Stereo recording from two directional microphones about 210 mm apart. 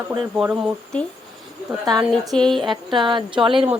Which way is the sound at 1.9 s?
20° right (ahead or behind).